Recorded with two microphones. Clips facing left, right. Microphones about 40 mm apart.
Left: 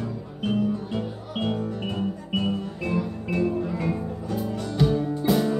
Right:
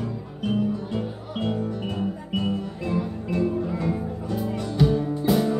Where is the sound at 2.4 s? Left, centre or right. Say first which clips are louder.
Right 1 dB; centre.